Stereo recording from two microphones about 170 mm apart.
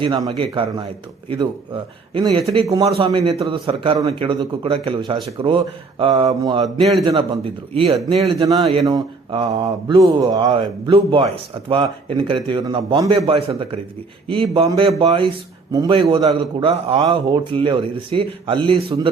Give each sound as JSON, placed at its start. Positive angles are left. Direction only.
{"t": 0.0, "sound": "a man's voice", "side_deg": -25}
{"t": 2.6, "sound": "a man's voice", "side_deg": -20}
{"t": 3.0, "sound": "a man's voice", "side_deg": -30}